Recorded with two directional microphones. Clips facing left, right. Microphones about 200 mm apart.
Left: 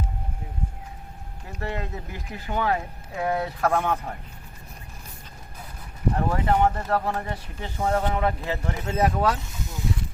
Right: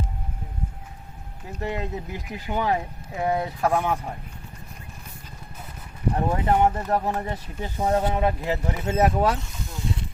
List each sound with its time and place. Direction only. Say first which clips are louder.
1.5 s speech: right 3 dB; 15° right (ahead or behind)
6.1 s speech: right 2 dB; 20° right (ahead or behind)